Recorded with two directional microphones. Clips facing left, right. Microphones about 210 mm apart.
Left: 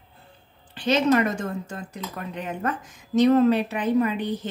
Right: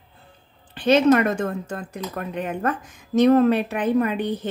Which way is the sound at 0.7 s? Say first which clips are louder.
Right 4 dB; 55° right (ahead or behind).